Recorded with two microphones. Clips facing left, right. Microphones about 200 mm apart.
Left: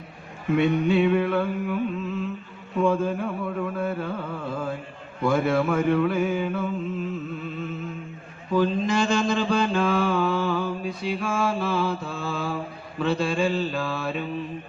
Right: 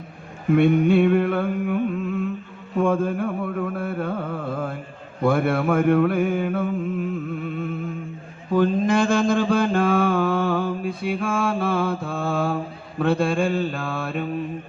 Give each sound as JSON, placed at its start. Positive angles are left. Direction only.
{"t": 0.5, "sound": "carnatic music", "side_deg": -55}
{"t": 5.2, "sound": "mantra", "side_deg": -55}
{"t": 13.0, "sound": "carnatic music", "side_deg": -55}